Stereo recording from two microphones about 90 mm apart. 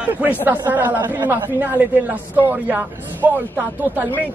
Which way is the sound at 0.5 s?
20° right (ahead or behind).